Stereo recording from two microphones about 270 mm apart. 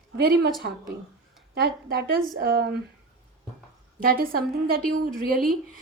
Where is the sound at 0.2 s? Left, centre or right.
Right.